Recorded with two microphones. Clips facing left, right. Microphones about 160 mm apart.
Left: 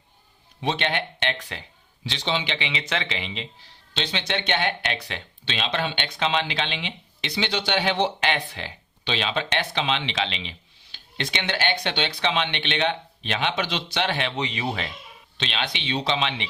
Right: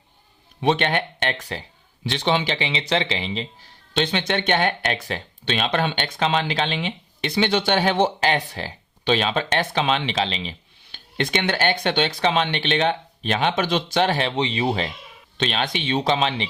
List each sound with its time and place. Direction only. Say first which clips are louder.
0.6 s speech: right 5 dB; 55° right (ahead or behind)
2.0 s speech: right 5 dB; 55° right (ahead or behind); by 3.7 s 35° right (ahead or behind)
3.9 s speech: right 6 dB; 50° right (ahead or behind)
10.8 s speech: right 6 dB; 50° right (ahead or behind); by 14.9 s 30° right (ahead or behind)
15.4 s speech: right 6 dB; 45° right (ahead or behind)